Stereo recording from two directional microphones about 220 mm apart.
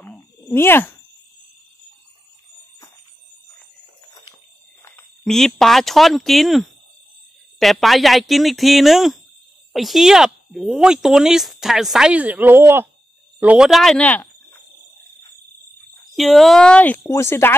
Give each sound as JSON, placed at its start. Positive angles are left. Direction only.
{"t": 0.0, "sound": "a sound", "side_deg": 10}
{"t": 4.8, "sound": "speech", "side_deg": 5}
{"t": 16.2, "sound": "speech", "side_deg": 0}